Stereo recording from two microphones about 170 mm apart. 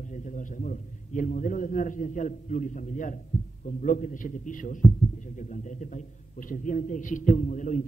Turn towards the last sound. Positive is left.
turn(degrees=50)  # may be behind; listen again after turning